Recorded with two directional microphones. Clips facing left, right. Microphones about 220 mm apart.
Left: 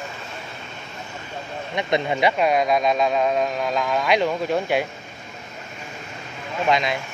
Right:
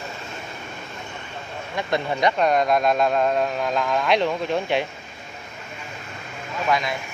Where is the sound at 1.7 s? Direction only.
15° left (ahead or behind).